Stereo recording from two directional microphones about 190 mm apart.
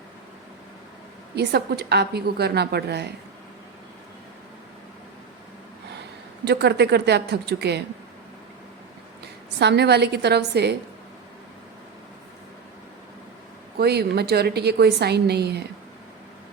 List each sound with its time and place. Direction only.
1.4 s a woman's voice: 60° right (ahead or behind)
6.4 s a woman's voice: 60° right (ahead or behind)
9.2 s a woman's voice: 60° right (ahead or behind)
13.7 s a woman's voice: 60° right (ahead or behind)